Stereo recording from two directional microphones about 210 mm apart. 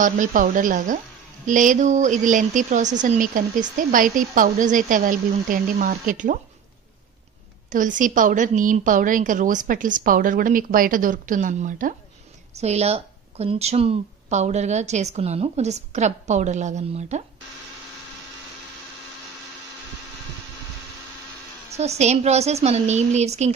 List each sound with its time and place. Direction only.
0.0 s speech: 40° right (ahead or behind)
7.7 s speech: 40° right (ahead or behind)
21.7 s speech: 30° right (ahead or behind)